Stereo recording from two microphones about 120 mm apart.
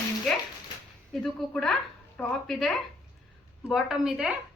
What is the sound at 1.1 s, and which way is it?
A woman's voice, 5° left (ahead or behind).